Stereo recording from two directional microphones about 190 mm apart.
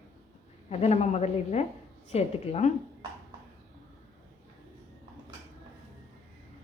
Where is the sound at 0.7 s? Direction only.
35° left (ahead or behind).